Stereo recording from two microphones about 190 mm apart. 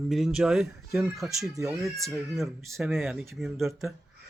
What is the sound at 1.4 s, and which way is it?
Speech, 15° right (ahead or behind).